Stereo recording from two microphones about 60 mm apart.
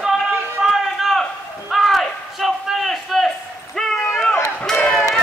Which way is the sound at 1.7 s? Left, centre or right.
Centre.